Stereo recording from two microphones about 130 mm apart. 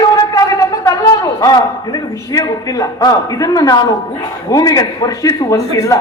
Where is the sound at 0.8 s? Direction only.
25° left (ahead or behind).